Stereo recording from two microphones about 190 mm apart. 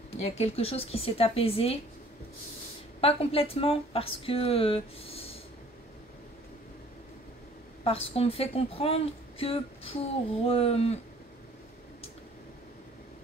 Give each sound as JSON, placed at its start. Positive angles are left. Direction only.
{"t": 0.1, "sound": "a woman's voice", "side_deg": 30}
{"t": 3.0, "sound": "a woman's voice", "side_deg": 30}
{"t": 7.8, "sound": "a woman's voice", "side_deg": 30}